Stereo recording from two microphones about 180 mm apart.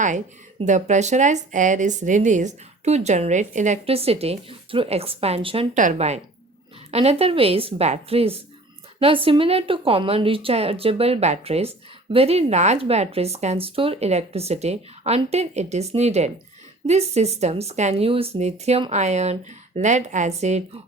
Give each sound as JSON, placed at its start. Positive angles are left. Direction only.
{"t": 0.6, "sound": "a woman's voice", "side_deg": -40}
{"t": 5.7, "sound": "a woman's voice", "side_deg": -45}